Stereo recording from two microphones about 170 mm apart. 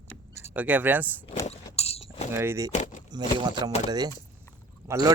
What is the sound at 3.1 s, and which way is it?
Speech, 25° right (ahead or behind).